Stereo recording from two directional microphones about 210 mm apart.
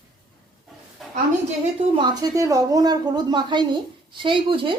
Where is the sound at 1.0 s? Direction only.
Centre (ahead or behind).